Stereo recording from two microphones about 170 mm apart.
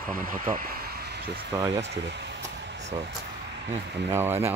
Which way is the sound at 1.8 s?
90° right.